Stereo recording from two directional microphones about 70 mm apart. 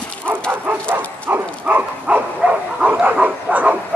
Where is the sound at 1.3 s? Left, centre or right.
Right.